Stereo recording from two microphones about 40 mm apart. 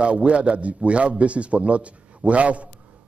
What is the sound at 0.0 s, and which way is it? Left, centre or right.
A man's voice, right.